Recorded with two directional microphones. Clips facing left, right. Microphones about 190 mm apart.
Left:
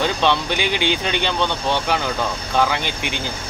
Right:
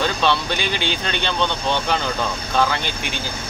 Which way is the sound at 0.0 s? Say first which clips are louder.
Left 1 dB; 15° left (ahead or behind).